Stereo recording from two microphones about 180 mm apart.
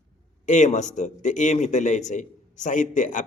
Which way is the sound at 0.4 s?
40° left (ahead or behind).